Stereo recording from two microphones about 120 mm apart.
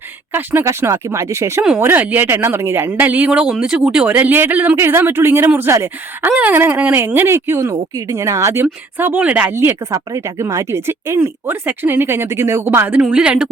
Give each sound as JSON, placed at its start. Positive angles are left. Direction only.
{"t": 0.3, "sound": "a woman's voice", "side_deg": -20}